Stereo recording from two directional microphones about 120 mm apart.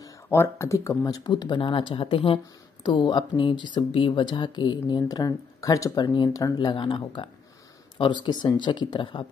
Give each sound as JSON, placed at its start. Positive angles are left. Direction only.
{"t": 0.3, "sound": "speech", "side_deg": 20}